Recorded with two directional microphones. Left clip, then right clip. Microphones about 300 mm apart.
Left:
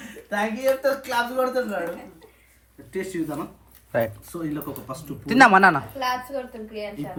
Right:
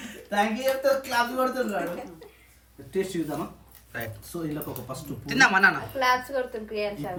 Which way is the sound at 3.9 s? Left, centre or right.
Centre.